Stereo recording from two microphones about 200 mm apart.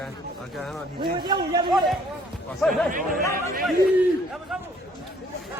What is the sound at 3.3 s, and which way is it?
Chatter, 45° right (ahead or behind).